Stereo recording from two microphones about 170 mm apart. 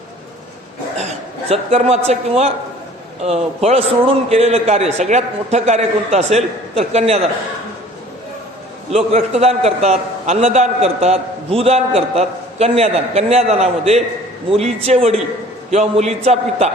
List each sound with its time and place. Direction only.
1.5 s a man's voice: 40° right (ahead or behind)
8.9 s a man's voice: 40° right (ahead or behind)